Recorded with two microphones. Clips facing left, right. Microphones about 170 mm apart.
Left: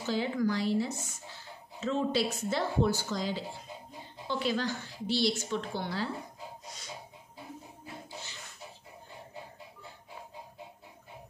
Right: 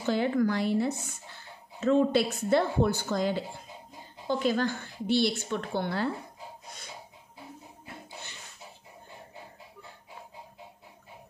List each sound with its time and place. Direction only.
0.0 s speech: 55° right (ahead or behind)
6.6 s snort: 55° right (ahead or behind)
7.8 s music: 60° right (ahead or behind)